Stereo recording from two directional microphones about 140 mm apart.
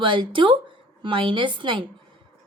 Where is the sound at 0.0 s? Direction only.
35° right (ahead or behind).